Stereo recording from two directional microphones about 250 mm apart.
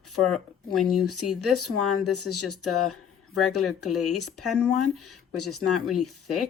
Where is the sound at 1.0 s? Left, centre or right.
Left.